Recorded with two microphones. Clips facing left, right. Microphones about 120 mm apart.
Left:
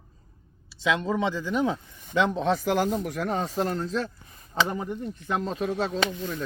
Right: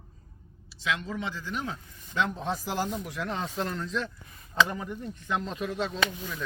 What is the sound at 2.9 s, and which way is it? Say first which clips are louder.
Speech: left 6 dB; 45° left (ahead or behind).